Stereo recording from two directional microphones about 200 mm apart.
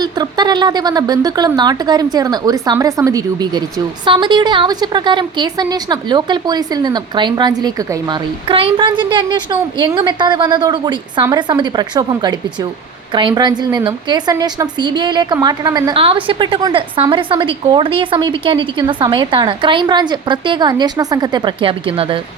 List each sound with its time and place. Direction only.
0.0 s a woman's voice: 20° right (ahead or behind)